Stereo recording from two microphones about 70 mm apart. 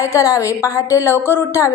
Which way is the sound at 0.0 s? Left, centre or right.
Left.